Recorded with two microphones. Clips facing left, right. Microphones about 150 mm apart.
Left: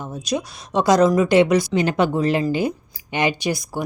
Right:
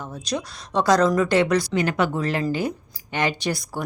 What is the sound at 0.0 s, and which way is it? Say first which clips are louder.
Speech: left 3 dB; 15° left (ahead or behind).